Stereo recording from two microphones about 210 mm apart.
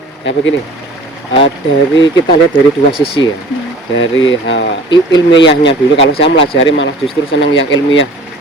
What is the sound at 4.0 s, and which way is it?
Speech, 65° left (ahead or behind).